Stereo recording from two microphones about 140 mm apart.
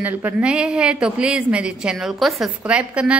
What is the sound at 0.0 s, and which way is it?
A woman's voice, 10° right (ahead or behind).